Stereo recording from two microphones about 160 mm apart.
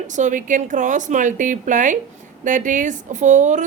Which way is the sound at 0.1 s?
50° right (ahead or behind).